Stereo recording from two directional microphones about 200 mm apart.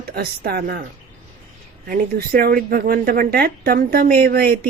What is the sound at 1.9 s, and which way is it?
Speech, 45° right (ahead or behind).